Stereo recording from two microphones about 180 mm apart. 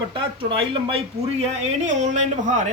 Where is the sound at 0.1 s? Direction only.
25° right (ahead or behind).